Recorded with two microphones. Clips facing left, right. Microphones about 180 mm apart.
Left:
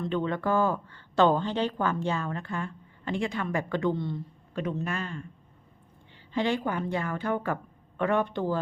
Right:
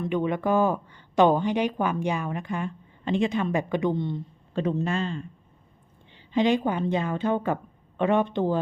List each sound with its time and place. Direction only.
0.0 s a woman's voice: 15° right (ahead or behind)
4.5 s a woman's voice: 30° right (ahead or behind)
6.3 s a woman's voice: 20° right (ahead or behind)